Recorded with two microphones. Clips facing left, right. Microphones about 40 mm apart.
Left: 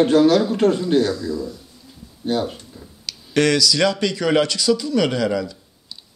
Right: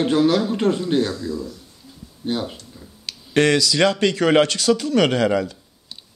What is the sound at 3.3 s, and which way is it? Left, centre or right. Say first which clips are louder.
Speech: even; right.